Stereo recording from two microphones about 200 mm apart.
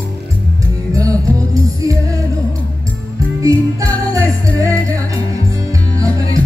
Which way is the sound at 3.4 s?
15° right (ahead or behind).